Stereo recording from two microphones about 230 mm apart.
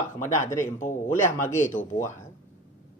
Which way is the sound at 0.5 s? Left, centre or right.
Centre.